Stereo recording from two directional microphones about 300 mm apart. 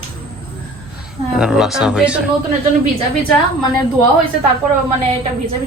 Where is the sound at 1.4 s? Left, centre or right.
Centre.